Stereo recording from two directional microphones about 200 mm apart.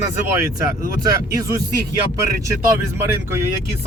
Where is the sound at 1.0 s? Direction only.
15° right (ahead or behind).